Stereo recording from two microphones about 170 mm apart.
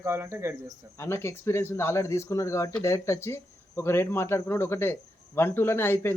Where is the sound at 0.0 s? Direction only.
15° right (ahead or behind).